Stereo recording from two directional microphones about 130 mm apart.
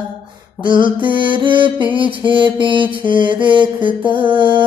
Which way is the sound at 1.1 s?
40° right (ahead or behind).